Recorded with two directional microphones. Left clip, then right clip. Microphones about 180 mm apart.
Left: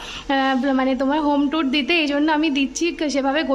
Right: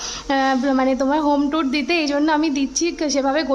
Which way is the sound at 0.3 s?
15° left (ahead or behind).